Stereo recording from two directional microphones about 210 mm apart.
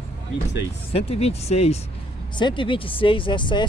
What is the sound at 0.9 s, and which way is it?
Speech, 30° left (ahead or behind).